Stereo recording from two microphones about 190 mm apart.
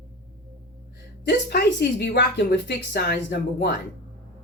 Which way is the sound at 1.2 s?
60° left (ahead or behind).